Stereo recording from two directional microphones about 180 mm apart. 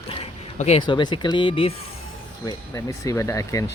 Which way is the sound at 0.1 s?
35° left (ahead or behind).